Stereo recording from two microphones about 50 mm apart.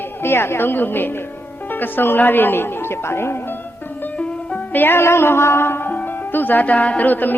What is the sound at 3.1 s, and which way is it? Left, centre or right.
Music, left.